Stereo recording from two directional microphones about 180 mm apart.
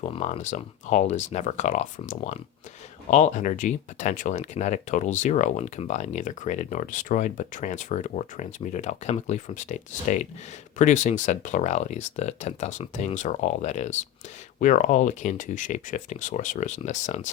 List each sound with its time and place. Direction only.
0.0 s speech: 40° left (ahead or behind)